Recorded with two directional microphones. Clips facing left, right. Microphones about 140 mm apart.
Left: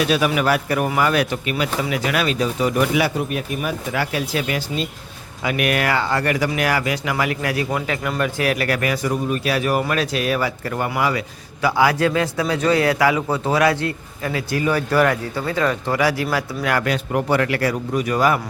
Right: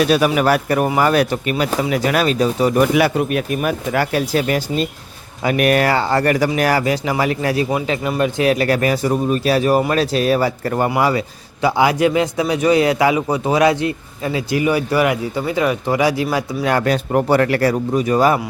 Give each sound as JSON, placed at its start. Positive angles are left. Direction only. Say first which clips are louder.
{"t": 0.1, "sound": "speech", "louder": "right 4 dB", "side_deg": -40}
{"t": 2.9, "sound": "a man's voice", "louder": "right 5 dB", "side_deg": -65}
{"t": 11.6, "sound": "a man's voice", "louder": "right 3 dB", "side_deg": -20}
{"t": 16.9, "sound": "speech", "louder": "right 4 dB", "side_deg": -40}